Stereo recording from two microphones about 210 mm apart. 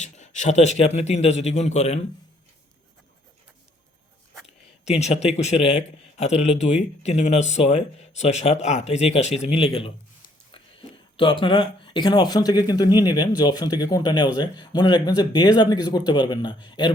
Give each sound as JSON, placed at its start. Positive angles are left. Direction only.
{"t": 0.0, "sound": "a man's voice", "side_deg": 35}
{"t": 4.9, "sound": "a man's voice", "side_deg": 30}